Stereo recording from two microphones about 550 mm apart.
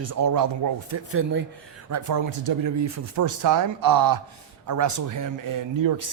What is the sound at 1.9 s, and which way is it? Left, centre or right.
Speech, right.